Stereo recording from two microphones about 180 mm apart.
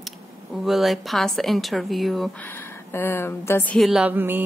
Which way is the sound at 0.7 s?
Centre (ahead or behind).